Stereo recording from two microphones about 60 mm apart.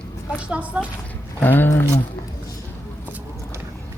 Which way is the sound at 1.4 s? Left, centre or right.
Left.